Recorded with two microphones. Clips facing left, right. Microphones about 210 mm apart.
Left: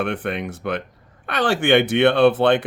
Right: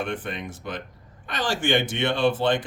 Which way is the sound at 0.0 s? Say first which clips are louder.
Left 6 dB; 65° left (ahead or behind).